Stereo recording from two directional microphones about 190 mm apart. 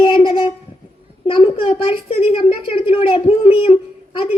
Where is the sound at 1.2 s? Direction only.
25° left (ahead or behind).